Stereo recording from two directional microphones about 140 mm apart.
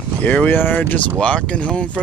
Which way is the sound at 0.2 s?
10° left (ahead or behind).